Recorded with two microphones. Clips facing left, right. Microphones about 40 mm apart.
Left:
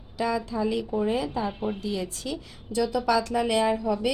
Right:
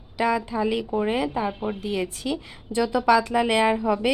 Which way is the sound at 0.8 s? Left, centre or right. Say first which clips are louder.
Right 2 dB; right.